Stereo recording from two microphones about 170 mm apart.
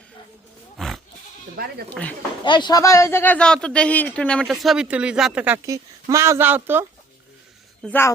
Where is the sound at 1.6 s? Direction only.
65° right (ahead or behind).